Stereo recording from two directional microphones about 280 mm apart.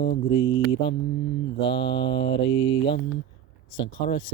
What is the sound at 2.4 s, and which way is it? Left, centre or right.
Mantra, centre.